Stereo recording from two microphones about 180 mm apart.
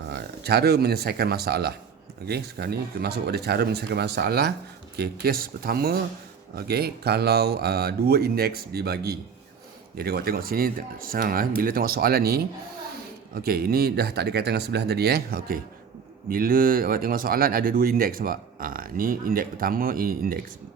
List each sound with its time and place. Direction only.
0.1 s speech: 65° right (ahead or behind)